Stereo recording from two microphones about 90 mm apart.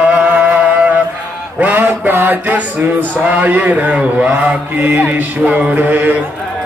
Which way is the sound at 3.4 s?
20° right (ahead or behind).